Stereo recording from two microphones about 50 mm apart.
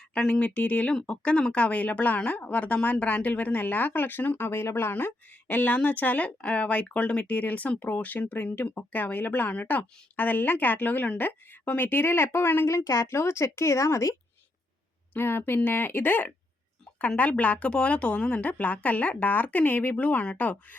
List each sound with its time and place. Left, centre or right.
0.2 s a woman's voice: left
0.9 s a woman's voice: centre; by 12.6 s left
12.6 s a woman's voice: left
15.1 s speech: left
17.2 s a woman's voice: left